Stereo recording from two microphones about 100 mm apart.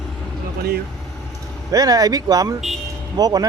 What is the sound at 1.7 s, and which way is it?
Speech, 35° right (ahead or behind).